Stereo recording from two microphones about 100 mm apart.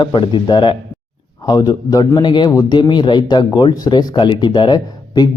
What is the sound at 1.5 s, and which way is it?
Speech, 40° left (ahead or behind).